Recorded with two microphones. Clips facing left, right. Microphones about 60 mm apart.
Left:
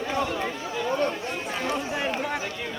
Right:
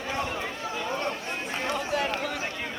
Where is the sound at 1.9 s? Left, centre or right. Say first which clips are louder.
Left 1 dB; centre.